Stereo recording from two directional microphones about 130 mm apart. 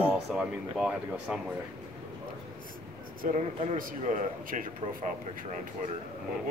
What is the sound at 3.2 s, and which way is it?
A man's voice, 65° right (ahead or behind).